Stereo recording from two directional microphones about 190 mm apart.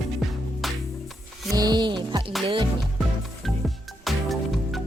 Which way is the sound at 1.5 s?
20° right (ahead or behind).